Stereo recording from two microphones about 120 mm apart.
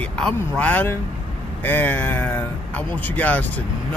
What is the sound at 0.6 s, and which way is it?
Speech, 15° left (ahead or behind).